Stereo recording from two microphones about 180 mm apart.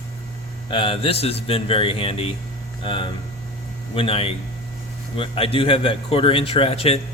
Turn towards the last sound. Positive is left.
turn(degrees=35)  # may be behind; listen again after turning